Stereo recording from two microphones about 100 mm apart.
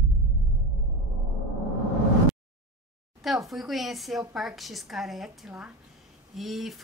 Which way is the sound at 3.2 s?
Centre (ahead or behind).